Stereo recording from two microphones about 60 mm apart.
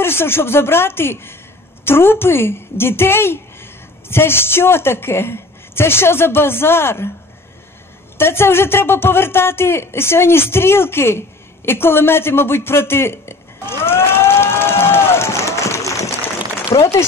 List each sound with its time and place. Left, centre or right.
0.0 s a woman's voice: left
8.2 s speech: left